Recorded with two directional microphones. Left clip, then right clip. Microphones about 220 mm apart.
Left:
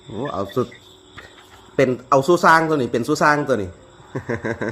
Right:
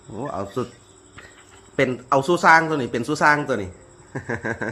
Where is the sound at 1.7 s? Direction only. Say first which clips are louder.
Left 3 dB; 25° left (ahead or behind).